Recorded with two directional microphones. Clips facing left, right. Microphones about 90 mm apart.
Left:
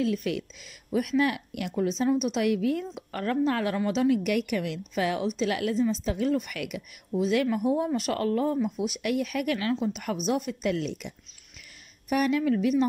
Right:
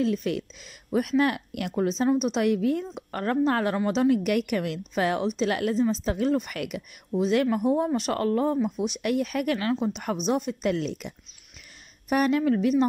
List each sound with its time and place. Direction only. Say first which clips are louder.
0.0 s a woman's voice: right 2 dB; 35° right (ahead or behind)
1.8 s a woman's voice: right 2 dB; 35° right (ahead or behind)